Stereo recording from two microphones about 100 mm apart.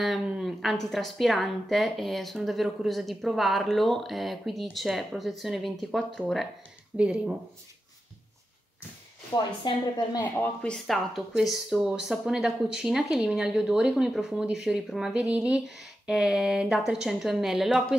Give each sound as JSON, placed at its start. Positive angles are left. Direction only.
{"t": 0.4, "sound": "speech", "side_deg": 0}
{"t": 6.9, "sound": "speech", "side_deg": -10}
{"t": 9.3, "sound": "speech", "side_deg": 50}
{"t": 10.2, "sound": "speech", "side_deg": 15}